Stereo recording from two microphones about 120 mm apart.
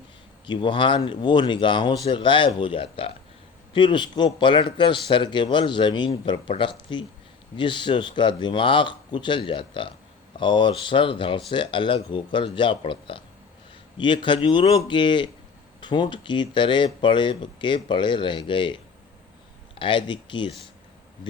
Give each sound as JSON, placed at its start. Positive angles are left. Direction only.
{"t": 0.4, "sound": "speech", "side_deg": 40}